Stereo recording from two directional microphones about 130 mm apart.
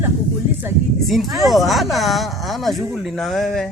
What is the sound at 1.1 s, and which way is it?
Speech, centre (ahead or behind).